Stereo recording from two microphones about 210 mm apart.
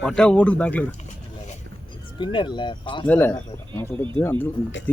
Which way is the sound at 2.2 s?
25° left (ahead or behind).